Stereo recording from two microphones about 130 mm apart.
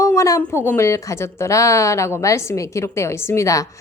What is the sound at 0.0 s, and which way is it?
A woman's voice, 25° left (ahead or behind).